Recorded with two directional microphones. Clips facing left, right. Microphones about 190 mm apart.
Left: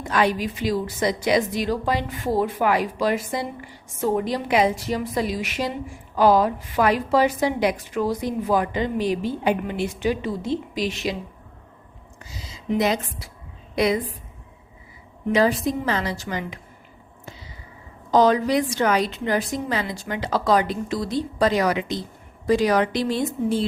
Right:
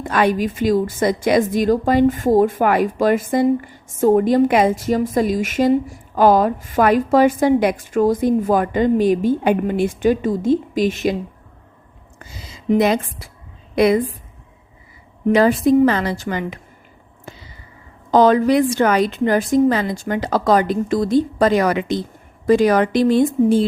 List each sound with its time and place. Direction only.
0.0 s a woman's voice: 55° right (ahead or behind)
12.2 s a woman's voice: 55° right (ahead or behind)
15.3 s a woman's voice: 55° right (ahead or behind)
18.1 s a woman's voice: 55° right (ahead or behind)